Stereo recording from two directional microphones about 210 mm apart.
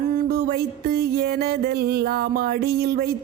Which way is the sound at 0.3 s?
45° right (ahead or behind).